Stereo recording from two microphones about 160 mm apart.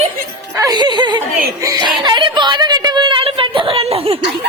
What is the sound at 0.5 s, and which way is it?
Music, 25° right (ahead or behind).